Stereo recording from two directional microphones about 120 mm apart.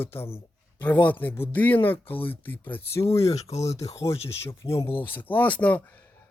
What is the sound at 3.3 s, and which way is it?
Speech, 65° left (ahead or behind).